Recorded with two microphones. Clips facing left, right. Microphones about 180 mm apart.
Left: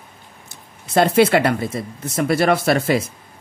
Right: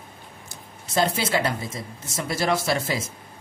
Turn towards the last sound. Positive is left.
turn(degrees=60)  # may be behind; listen again after turning